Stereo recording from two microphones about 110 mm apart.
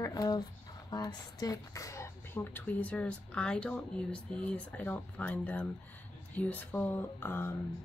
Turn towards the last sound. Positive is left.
turn(degrees=20)  # may be behind; listen again after turning